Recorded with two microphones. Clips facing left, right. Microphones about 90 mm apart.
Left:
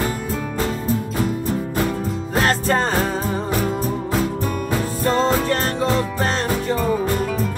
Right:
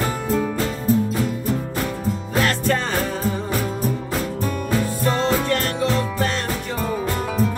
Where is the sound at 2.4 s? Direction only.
40° left (ahead or behind).